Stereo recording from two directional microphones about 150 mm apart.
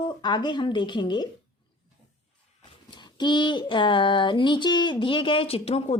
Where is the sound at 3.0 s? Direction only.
30° left (ahead or behind).